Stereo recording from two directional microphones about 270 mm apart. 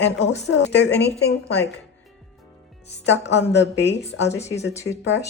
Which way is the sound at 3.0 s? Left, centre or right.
Left.